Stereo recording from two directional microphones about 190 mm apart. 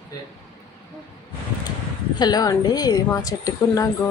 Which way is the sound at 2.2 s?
20° left (ahead or behind).